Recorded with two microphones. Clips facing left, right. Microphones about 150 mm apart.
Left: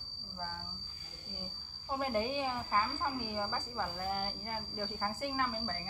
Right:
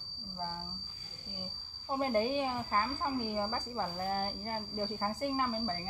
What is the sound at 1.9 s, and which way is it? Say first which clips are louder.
A woman's voice: right 3 dB; 25° right (ahead or behind).